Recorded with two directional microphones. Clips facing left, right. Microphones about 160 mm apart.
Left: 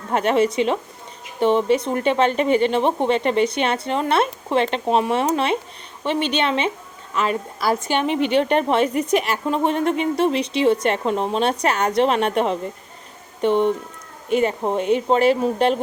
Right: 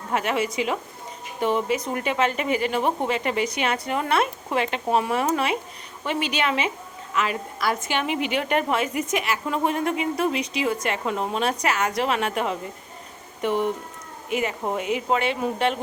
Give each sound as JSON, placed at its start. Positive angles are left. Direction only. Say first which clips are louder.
{"t": 0.1, "sound": "a woman's voice", "louder": "left 6 dB", "side_deg": 35}